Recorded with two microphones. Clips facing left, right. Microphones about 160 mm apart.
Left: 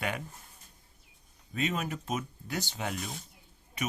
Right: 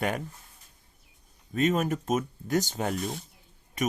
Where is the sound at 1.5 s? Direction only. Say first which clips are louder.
Right 7 dB; 45° right (ahead or behind).